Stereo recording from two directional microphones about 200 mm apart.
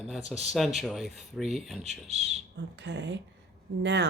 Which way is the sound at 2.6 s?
60° right (ahead or behind).